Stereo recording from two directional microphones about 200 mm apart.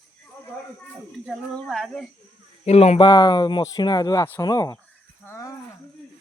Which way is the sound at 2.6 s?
30° left (ahead or behind).